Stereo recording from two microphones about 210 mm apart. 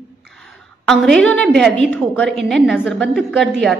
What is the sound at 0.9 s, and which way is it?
A woman's voice, centre (ahead or behind).